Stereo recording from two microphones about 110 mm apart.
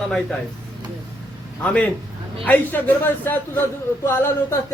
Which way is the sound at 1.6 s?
10° left (ahead or behind).